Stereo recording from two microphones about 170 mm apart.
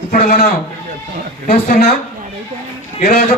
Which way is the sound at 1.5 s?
40° left (ahead or behind).